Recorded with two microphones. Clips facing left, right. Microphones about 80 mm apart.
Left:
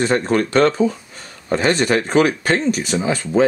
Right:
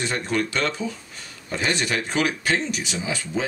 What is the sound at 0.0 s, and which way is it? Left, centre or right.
Speech, left.